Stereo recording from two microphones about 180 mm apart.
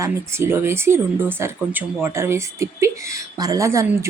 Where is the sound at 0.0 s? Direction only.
15° right (ahead or behind).